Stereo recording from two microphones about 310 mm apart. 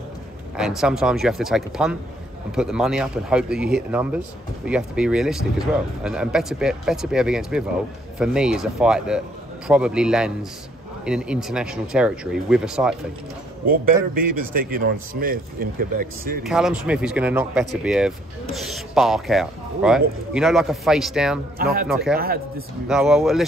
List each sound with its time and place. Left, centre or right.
0.6 s speech: centre
13.7 s a man's voice: right
16.4 s speech: centre
22.1 s a man's voice: right
22.8 s speech: centre